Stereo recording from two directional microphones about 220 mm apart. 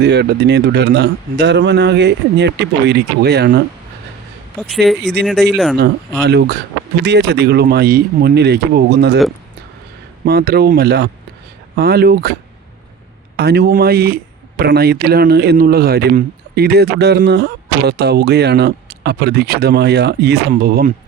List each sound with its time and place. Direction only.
0.0 s a man's voice: 50° right (ahead or behind)
4.6 s speech: centre (ahead or behind)
5.8 s a man's voice: 50° right (ahead or behind)
10.2 s a man's voice: 45° right (ahead or behind)